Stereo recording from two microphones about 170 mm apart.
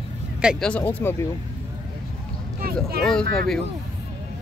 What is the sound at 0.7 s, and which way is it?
Speech, 10° left (ahead or behind).